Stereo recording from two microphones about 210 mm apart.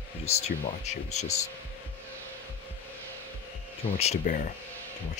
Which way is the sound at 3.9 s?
35° left (ahead or behind).